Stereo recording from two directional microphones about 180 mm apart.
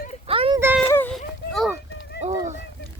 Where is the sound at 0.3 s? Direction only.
30° right (ahead or behind).